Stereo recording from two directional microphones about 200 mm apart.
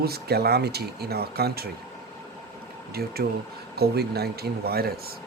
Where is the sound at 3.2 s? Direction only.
50° right (ahead or behind).